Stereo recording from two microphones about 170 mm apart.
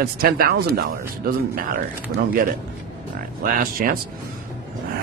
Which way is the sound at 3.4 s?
55° right (ahead or behind).